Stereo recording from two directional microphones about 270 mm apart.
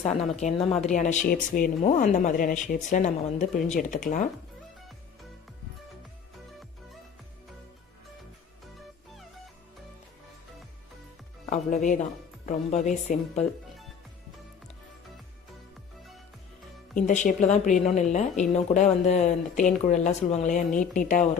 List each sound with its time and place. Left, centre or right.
0.0 s speech: left
11.4 s speech: left
17.1 s speech: left